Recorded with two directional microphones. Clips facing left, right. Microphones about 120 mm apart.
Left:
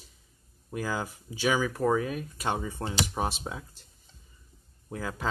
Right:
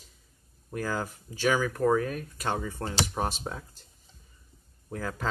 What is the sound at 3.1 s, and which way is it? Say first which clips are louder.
Speech: even; 5° left (ahead or behind).